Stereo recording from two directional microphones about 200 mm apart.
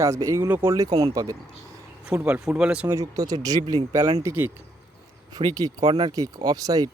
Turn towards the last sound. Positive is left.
turn(degrees=-20)  # may be behind; listen again after turning